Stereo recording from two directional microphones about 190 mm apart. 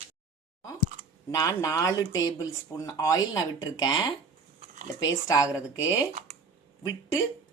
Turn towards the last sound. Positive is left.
turn(degrees=20)  # may be behind; listen again after turning